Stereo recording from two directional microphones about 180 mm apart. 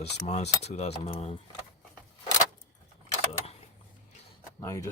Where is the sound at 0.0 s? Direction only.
35° left (ahead or behind).